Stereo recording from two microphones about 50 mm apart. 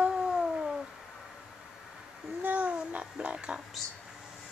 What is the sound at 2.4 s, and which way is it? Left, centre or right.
Speech, right.